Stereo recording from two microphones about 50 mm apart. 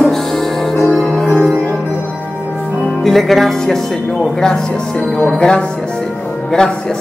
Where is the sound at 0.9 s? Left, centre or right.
Centre.